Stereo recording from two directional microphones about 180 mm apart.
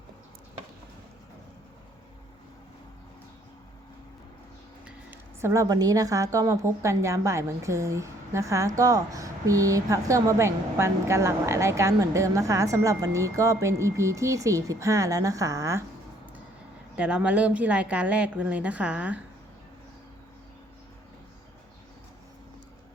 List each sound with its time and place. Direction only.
4.9 s speech: 10° right (ahead or behind)
17.0 s speech: 5° right (ahead or behind)